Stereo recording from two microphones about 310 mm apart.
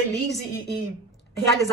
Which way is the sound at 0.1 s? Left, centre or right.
Centre.